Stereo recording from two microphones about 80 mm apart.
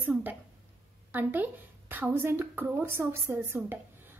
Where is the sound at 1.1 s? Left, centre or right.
Right.